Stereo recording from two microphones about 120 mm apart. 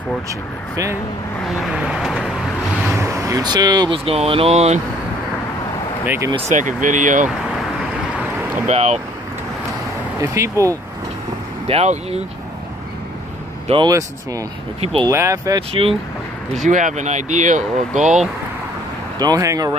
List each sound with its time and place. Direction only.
0.3 s speech: 25° right (ahead or behind)
1.4 s vehicle: centre (ahead or behind)
3.0 s speech: 25° right (ahead or behind)
4.0 s speech: 55° right (ahead or behind)
6.0 s speech: 20° right (ahead or behind)
6.5 s speech: 90° right
8.6 s speech: 70° right (ahead or behind)
10.2 s speech: 25° right (ahead or behind)
11.6 s speech: 60° right (ahead or behind)
13.8 s speech: 30° right (ahead or behind)
14.8 s speech: 55° right (ahead or behind)
15.0 s speech: 25° right (ahead or behind)
16.5 s speech: 90° right
19.1 s speech: 30° right (ahead or behind)